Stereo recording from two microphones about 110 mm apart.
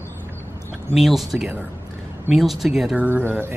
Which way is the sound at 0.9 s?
Centre (ahead or behind).